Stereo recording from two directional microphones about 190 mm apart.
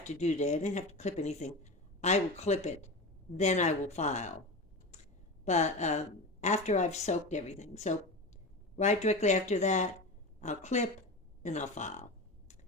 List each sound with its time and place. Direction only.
0.0 s speech: 35° left (ahead or behind)
5.5 s speech: 40° left (ahead or behind)